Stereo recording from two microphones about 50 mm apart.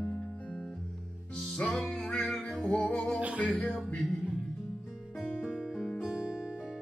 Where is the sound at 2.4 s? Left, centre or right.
Centre.